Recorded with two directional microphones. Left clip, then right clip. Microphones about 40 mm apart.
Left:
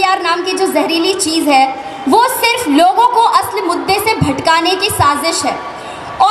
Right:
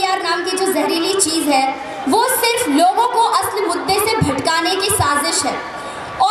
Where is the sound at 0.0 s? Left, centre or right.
Left.